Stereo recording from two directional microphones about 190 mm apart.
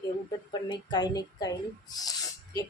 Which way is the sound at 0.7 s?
20° left (ahead or behind).